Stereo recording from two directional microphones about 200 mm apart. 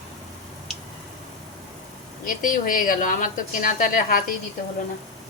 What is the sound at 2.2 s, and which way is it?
A woman's voice, 45° left (ahead or behind).